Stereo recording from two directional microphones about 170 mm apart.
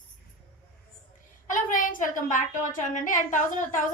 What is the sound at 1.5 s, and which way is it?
A woman's voice, 50° left (ahead or behind).